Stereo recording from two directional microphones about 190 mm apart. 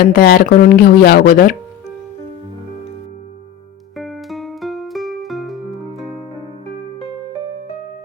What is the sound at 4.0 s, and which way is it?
Music, centre (ahead or behind).